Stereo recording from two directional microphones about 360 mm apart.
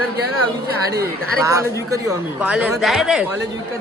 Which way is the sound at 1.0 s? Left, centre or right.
Centre.